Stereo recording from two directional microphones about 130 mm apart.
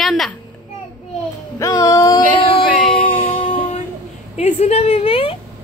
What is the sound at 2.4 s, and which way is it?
Music, 40° left (ahead or behind).